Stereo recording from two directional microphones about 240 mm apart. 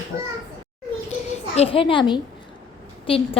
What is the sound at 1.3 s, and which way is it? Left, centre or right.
A child's voice, left.